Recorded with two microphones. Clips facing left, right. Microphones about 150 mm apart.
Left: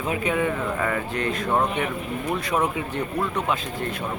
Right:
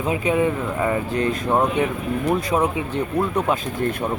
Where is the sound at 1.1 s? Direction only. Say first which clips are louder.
Right 4 dB; 35° right (ahead or behind).